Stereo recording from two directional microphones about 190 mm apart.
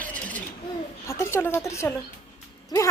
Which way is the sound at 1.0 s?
15° left (ahead or behind).